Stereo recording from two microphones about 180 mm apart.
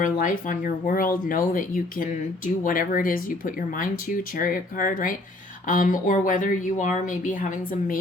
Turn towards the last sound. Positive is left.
turn(degrees=45)  # may be behind; listen again after turning